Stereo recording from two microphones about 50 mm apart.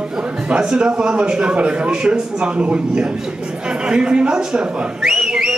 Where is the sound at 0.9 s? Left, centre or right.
Right.